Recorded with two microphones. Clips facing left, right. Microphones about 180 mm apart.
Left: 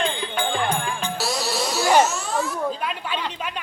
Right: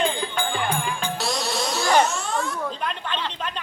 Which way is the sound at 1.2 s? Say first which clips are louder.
Left 2 dB; 5° left (ahead or behind).